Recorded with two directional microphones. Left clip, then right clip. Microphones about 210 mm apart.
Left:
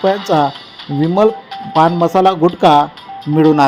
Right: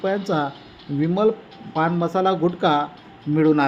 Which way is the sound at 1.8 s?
20° left (ahead or behind).